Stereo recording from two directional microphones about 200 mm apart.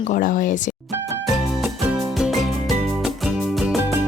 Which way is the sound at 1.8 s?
Centre (ahead or behind).